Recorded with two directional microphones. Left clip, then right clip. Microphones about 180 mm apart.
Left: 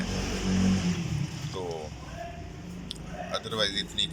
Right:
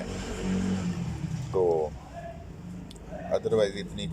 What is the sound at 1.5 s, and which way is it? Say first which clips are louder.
Speech: right 11 dB; 45° right (ahead or behind).